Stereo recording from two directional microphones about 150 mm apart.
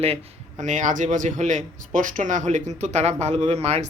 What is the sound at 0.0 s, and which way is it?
Speech, 40° right (ahead or behind).